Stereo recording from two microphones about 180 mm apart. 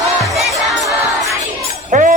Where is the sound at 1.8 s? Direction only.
45° right (ahead or behind).